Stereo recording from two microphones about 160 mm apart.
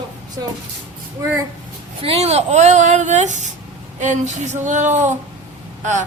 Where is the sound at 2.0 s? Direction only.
40° right (ahead or behind).